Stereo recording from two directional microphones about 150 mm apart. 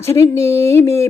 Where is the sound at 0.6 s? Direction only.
15° left (ahead or behind).